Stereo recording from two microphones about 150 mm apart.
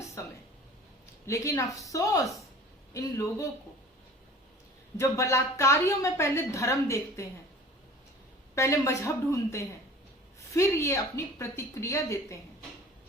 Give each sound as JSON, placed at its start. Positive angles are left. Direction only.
{"t": 0.2, "sound": "a sound", "side_deg": 20}
{"t": 1.3, "sound": "a woman's voice", "side_deg": 20}
{"t": 4.9, "sound": "a woman's voice", "side_deg": 20}
{"t": 8.5, "sound": "a woman's voice", "side_deg": 20}